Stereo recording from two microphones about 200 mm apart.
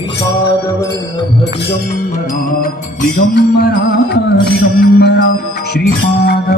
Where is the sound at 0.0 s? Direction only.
15° left (ahead or behind).